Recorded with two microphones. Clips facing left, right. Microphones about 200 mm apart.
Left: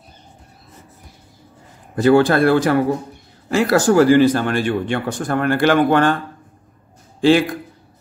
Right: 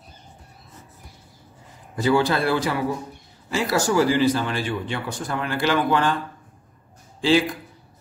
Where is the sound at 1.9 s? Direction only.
60° left (ahead or behind).